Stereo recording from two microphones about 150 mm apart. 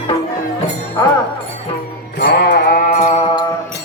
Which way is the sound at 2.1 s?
85° left.